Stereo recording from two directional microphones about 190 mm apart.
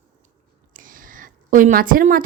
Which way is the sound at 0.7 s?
45° right (ahead or behind).